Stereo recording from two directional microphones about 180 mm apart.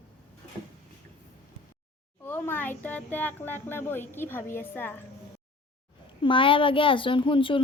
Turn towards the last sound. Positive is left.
turn(degrees=30)  # may be behind; listen again after turning